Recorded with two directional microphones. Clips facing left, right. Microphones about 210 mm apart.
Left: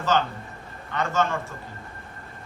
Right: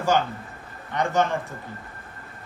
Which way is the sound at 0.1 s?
15° right (ahead or behind).